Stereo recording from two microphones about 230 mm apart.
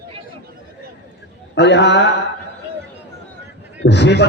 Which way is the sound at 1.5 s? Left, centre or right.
Left.